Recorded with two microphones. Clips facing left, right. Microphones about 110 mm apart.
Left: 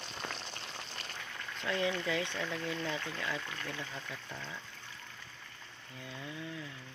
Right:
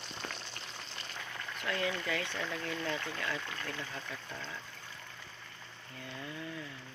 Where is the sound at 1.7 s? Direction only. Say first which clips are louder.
Left 2 dB; 20° left (ahead or behind).